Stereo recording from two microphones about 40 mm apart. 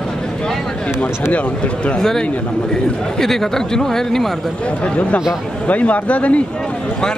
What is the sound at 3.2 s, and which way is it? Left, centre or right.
Speech, centre.